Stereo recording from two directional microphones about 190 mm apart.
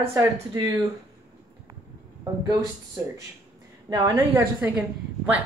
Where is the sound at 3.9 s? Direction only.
20° right (ahead or behind).